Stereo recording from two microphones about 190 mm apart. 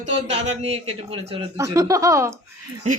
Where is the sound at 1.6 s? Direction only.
15° right (ahead or behind).